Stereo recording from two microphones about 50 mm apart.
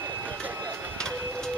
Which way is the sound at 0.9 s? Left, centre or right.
Centre.